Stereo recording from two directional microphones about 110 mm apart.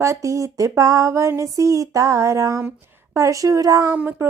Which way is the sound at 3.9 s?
15° right (ahead or behind).